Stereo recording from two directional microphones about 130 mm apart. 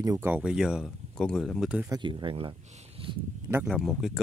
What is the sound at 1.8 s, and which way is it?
Speech, 35° right (ahead or behind).